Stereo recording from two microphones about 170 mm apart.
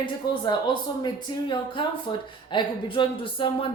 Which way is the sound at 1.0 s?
30° left (ahead or behind).